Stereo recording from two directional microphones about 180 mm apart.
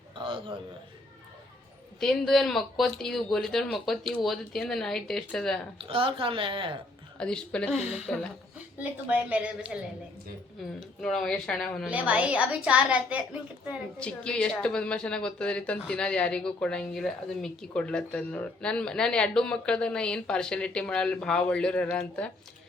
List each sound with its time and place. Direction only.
0.2 s a sound: 30° right (ahead or behind)
2.0 s a woman's voice: centre (ahead or behind)
5.8 s speech: 30° right (ahead or behind)
7.2 s a woman's voice: 5° left (ahead or behind)
8.8 s a woman's voice: 10° right (ahead or behind)
11.0 s a woman's voice: centre (ahead or behind)
11.9 s a woman's voice: 10° right (ahead or behind)
14.0 s a woman's voice: 5° left (ahead or behind)